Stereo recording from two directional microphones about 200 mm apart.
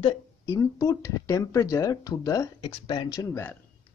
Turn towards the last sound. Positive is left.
turn(degrees=15)  # may be behind; listen again after turning